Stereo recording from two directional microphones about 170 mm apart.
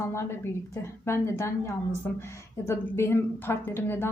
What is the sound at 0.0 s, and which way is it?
A woman's voice, 15° left (ahead or behind).